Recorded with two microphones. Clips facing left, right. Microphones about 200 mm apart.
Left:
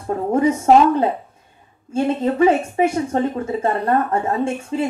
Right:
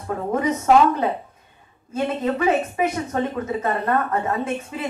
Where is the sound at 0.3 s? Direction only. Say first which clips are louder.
Left 4 dB; 30° left (ahead or behind).